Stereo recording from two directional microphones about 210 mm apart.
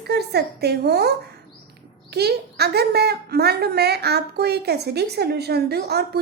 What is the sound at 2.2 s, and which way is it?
A woman's voice, 50° right (ahead or behind).